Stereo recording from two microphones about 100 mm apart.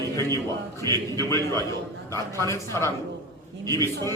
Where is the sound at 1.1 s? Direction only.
30° left (ahead or behind).